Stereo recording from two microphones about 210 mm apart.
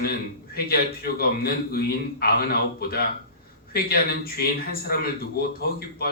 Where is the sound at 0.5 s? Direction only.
45° left (ahead or behind).